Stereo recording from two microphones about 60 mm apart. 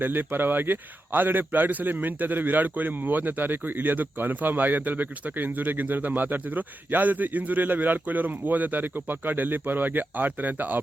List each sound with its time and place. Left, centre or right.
0.0 s a man's voice: right